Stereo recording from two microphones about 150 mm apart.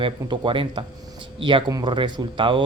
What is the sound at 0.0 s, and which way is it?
Speech, 35° right (ahead or behind).